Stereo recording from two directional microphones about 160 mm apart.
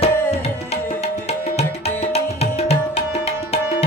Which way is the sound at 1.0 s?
40° left (ahead or behind).